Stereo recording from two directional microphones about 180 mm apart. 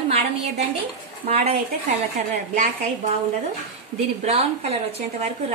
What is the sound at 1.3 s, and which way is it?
Speech, 35° right (ahead or behind).